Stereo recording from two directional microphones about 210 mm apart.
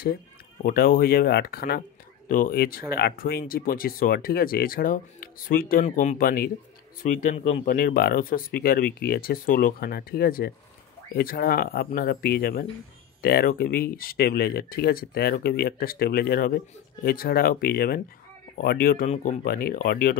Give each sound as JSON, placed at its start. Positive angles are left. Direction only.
{"t": 0.7, "sound": "speech", "side_deg": 45}